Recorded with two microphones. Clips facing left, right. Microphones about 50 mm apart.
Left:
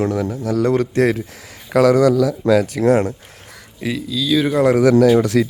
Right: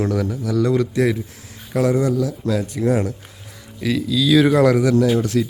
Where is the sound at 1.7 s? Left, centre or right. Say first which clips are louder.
Left 6 dB; left.